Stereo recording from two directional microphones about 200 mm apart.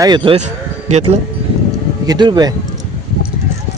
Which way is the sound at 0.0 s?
25° right (ahead or behind).